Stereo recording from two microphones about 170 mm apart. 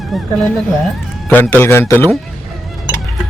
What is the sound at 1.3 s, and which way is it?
Speech, 10° left (ahead or behind).